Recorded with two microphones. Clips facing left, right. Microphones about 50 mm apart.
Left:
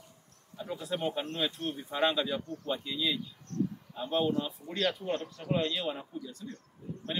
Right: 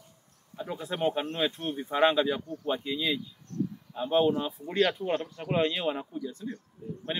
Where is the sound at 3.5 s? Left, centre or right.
Left.